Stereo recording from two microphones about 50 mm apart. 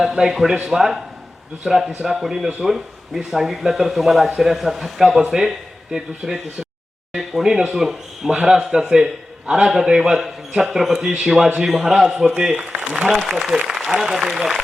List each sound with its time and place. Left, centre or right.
0.0 s a man's voice: centre
7.7 s a man's voice: centre
12.5 s speech: right
13.2 s a man's voice: centre